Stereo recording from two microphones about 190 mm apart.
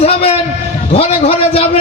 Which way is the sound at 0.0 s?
30° left (ahead or behind).